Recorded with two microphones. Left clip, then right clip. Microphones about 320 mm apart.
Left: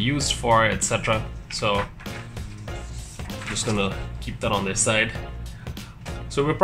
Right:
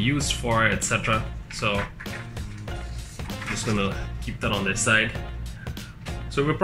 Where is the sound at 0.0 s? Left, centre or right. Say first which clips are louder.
Left 2 dB; centre.